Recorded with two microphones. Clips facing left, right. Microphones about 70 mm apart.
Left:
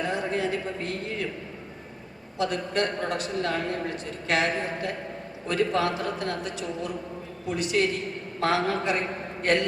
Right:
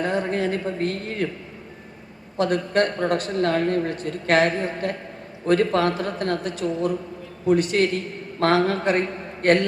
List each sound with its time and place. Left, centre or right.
0.0 s a woman's voice: right
2.4 s a man's voice: right